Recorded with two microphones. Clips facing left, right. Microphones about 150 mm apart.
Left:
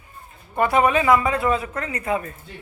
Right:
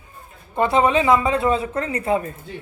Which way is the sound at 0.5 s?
25° right (ahead or behind).